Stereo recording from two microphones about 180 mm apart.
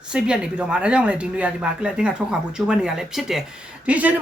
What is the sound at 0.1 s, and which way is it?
Speech, 5° right (ahead or behind).